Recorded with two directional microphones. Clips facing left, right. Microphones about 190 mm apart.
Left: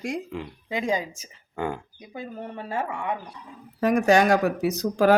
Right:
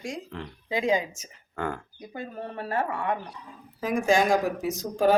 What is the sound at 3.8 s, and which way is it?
Speech, 70° left (ahead or behind).